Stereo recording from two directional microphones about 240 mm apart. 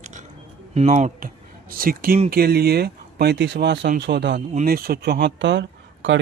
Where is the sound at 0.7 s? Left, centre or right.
Right.